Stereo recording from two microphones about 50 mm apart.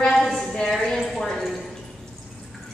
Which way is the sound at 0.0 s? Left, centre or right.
Centre.